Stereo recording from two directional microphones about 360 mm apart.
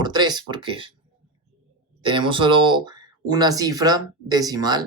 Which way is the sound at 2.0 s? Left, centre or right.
Centre.